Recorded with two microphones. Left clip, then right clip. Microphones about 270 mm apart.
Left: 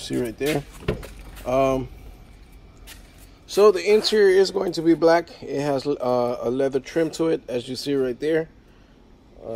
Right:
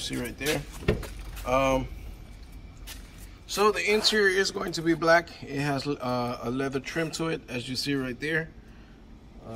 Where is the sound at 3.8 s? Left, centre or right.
Centre.